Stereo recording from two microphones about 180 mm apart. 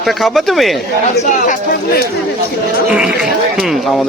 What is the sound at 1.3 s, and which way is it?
Speech, 45° left (ahead or behind).